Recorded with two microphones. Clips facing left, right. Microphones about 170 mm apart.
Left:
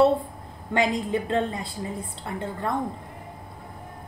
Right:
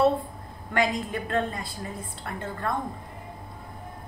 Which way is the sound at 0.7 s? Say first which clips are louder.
Left 3 dB; 20° left (ahead or behind).